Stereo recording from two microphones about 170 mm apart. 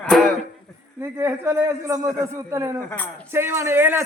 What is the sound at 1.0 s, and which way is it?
A man's voice, 15° right (ahead or behind).